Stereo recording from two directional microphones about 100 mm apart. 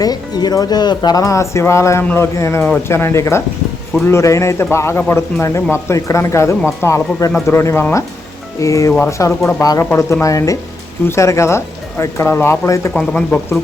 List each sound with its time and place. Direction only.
0.0 s speech: 40° left (ahead or behind)
12.9 s speech: 5° left (ahead or behind)